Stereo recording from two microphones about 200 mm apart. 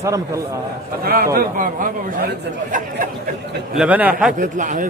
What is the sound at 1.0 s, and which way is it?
Speech, 50° right (ahead or behind).